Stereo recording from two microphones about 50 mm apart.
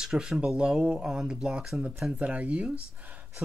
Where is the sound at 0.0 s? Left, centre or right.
Centre.